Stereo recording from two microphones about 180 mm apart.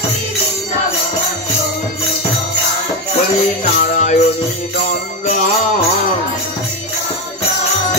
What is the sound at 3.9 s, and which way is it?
Music, 40° left (ahead or behind).